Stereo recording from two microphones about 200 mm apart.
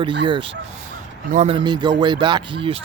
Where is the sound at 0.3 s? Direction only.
25° right (ahead or behind).